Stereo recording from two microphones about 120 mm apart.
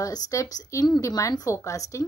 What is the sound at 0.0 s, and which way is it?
A woman's voice, 30° left (ahead or behind).